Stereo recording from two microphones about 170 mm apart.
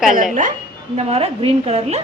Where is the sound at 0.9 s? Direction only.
40° right (ahead or behind).